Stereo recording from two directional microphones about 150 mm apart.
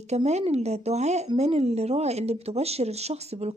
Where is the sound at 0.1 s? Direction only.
45° right (ahead or behind).